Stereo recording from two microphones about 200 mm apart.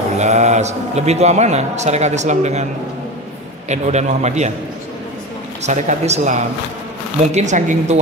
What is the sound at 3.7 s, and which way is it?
Speech, 35° right (ahead or behind).